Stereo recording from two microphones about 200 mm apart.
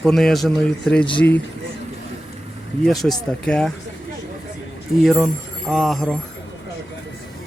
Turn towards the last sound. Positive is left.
turn(degrees=0)  # may be behind; listen again after turning